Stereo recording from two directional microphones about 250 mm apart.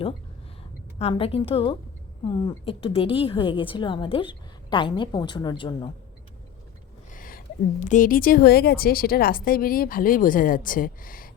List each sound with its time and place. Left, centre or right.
0.9 s a woman's voice: left
7.1 s a woman's voice: left